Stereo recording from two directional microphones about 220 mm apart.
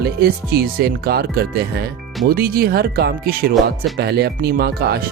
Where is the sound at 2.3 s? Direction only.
45° right (ahead or behind).